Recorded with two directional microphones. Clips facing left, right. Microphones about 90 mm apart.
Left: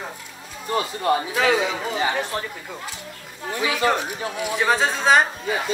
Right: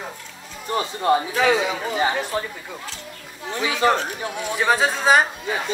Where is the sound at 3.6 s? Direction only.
25° right (ahead or behind).